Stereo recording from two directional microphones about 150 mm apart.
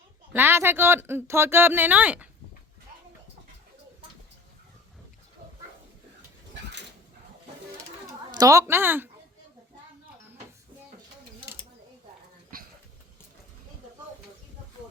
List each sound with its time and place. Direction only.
0.3 s speech: 15° right (ahead or behind)
8.3 s speech: 25° right (ahead or behind)
12.5 s a sound: 75° right (ahead or behind)